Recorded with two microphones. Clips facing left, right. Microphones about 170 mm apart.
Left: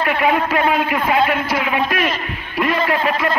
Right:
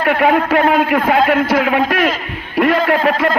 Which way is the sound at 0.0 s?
55° right (ahead or behind).